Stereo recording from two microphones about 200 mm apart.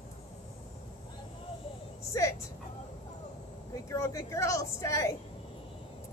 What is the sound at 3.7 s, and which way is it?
Speech, 15° left (ahead or behind).